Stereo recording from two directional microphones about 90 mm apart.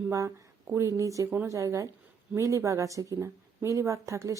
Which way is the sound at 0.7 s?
35° right (ahead or behind).